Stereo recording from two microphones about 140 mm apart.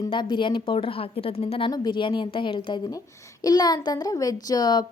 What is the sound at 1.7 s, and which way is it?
A woman's voice, 30° left (ahead or behind).